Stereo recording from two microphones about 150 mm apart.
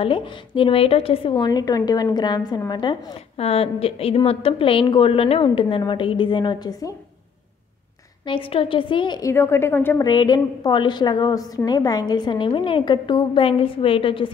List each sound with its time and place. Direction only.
0.0 s a woman's voice: 35° left (ahead or behind)
8.3 s a woman's voice: 35° left (ahead or behind)
9.3 s a woman's voice: 15° left (ahead or behind)
10.0 s a woman's voice: 30° left (ahead or behind)